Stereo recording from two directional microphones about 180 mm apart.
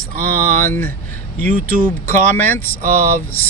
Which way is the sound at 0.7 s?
10° left (ahead or behind).